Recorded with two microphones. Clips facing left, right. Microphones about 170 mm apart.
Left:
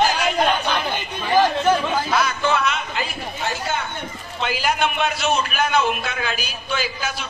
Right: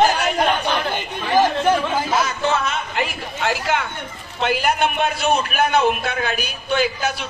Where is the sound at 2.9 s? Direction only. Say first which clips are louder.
Right 3 dB; 85° right.